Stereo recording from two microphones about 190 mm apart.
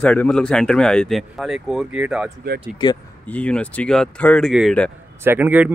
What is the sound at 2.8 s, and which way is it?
Speech, 25° left (ahead or behind).